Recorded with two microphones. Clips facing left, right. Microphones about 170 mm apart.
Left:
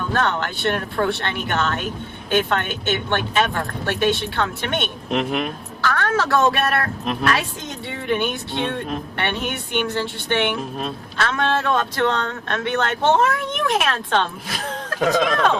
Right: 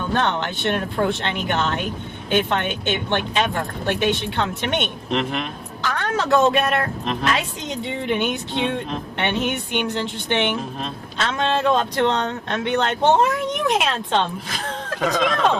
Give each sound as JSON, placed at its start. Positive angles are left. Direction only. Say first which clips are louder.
{"t": 0.1, "sound": "speech", "louder": "even", "side_deg": -20}
{"t": 5.1, "sound": "speech", "louder": "left 2 dB", "side_deg": 5}
{"t": 5.8, "sound": "a woman's voice", "louder": "left 2 dB", "side_deg": -15}
{"t": 7.0, "sound": "speech", "louder": "left 1 dB", "side_deg": 5}
{"t": 7.3, "sound": "speech", "louder": "left 1 dB", "side_deg": -20}